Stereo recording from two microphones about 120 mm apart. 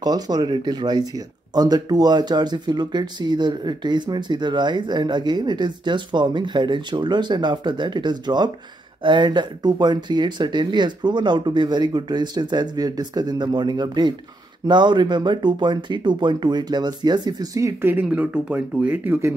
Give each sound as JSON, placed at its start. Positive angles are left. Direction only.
{"t": 0.0, "sound": "speech", "side_deg": -35}